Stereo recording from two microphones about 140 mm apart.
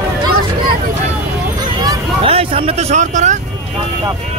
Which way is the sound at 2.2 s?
45° right (ahead or behind).